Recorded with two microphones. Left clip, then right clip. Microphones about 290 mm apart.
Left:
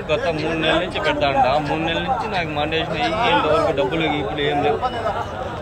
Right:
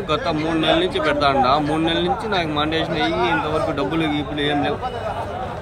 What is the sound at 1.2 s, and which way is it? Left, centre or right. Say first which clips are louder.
Speech: even; centre.